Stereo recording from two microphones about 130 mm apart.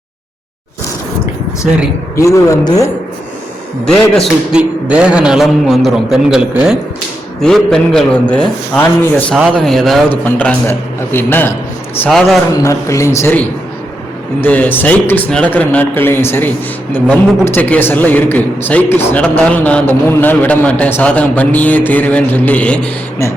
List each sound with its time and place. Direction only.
1.6 s speech: 5° right (ahead or behind)
2.1 s a man's voice: 25° left (ahead or behind)
3.8 s a man's voice: 5° left (ahead or behind)
4.5 s a man's voice: 10° right (ahead or behind)
7.4 s a man's voice: 5° left (ahead or behind)
10.1 s a man's voice: 15° left (ahead or behind)
12.0 s a man's voice: centre (ahead or behind)
12.6 s a man's voice: 25° left (ahead or behind)